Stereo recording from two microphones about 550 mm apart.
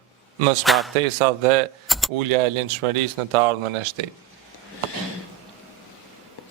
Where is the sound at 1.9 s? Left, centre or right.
Centre.